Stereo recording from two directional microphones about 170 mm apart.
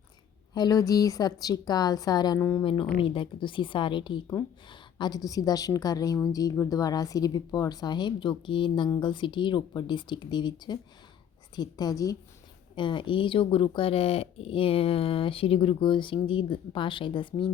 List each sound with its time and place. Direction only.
0.5 s a woman's voice: 25° left (ahead or behind)
3.0 s a woman's voice: 30° left (ahead or behind)